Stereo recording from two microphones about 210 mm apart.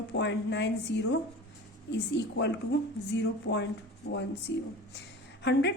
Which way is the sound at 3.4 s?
55° left (ahead or behind).